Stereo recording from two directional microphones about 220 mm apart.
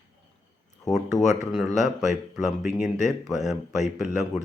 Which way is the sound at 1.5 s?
Centre (ahead or behind).